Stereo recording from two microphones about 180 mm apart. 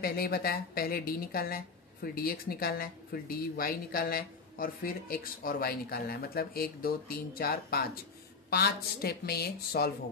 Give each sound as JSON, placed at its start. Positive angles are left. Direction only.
{"t": 0.0, "sound": "speech", "side_deg": 55}